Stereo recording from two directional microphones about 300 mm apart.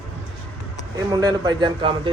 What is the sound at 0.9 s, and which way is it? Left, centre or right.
A man's voice, centre.